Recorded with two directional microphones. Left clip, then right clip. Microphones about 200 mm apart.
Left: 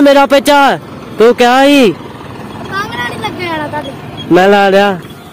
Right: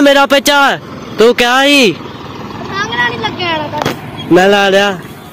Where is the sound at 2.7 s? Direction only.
60° left (ahead or behind).